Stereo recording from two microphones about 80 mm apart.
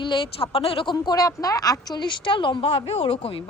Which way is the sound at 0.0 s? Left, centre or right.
Left.